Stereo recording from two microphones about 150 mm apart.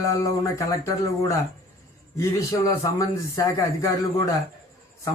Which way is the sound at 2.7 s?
20° left (ahead or behind).